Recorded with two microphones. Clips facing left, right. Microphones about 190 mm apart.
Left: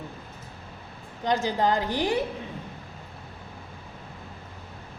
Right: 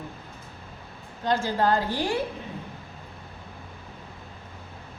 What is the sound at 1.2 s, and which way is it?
A woman's voice, 20° left (ahead or behind).